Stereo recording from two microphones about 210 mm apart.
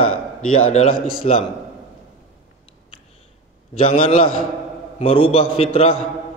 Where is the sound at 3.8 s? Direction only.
25° left (ahead or behind).